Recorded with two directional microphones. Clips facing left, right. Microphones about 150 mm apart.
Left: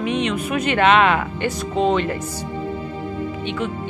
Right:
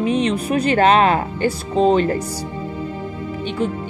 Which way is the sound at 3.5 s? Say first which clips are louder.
Right 5 dB; 35° right (ahead or behind).